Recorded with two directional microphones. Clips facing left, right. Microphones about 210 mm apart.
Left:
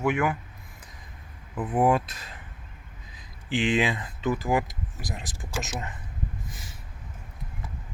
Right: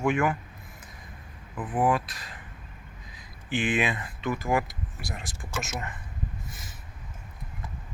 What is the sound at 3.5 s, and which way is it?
Speech, 15° left (ahead or behind).